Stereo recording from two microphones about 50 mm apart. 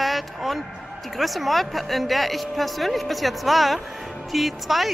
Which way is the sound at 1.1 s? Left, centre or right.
Centre.